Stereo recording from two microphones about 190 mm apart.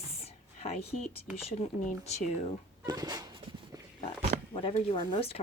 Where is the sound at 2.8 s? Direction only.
20° right (ahead or behind).